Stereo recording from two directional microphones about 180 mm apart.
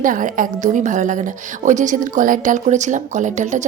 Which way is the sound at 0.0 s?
50° right (ahead or behind).